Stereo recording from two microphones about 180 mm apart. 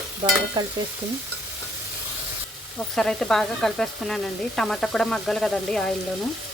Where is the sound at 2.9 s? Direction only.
Centre (ahead or behind).